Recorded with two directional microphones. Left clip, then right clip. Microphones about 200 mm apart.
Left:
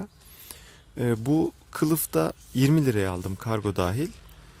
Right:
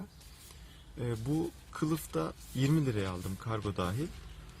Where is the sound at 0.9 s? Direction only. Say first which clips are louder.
Left 11 dB; 55° left (ahead or behind).